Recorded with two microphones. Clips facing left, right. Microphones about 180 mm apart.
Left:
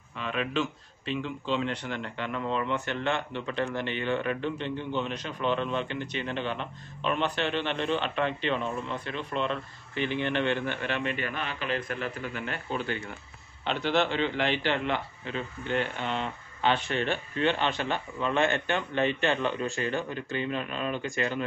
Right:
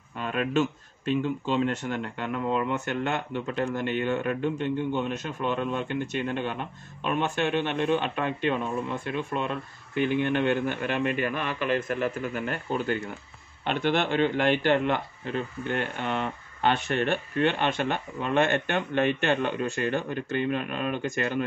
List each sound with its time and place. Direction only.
0.2 s speech: 45° right (ahead or behind)